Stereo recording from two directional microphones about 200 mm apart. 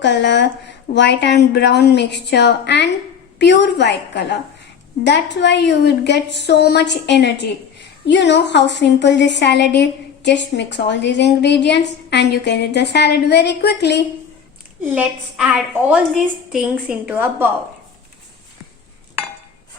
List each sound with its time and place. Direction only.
0.0 s a woman's voice: 60° left (ahead or behind)
14.9 s a woman's voice: 5° right (ahead or behind)